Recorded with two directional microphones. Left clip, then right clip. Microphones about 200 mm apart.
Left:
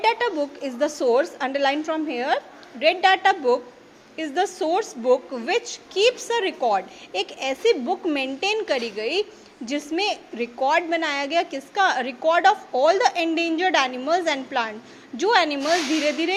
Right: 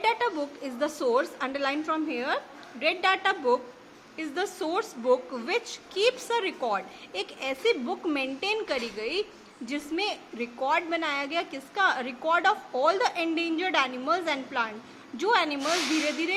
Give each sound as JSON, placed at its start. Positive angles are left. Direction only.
{"t": 0.0, "sound": "a woman's voice", "side_deg": 15}